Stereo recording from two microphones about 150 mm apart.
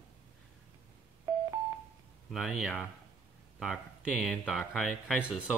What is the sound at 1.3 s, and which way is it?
Telephone dialing, 20° right (ahead or behind).